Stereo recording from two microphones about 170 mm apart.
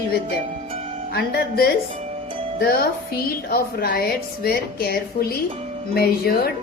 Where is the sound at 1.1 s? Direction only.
65° left (ahead or behind).